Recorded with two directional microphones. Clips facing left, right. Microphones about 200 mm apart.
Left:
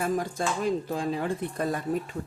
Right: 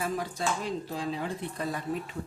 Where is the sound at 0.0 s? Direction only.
50° left (ahead or behind).